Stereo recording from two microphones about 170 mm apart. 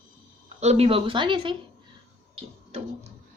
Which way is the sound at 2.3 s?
40° right (ahead or behind).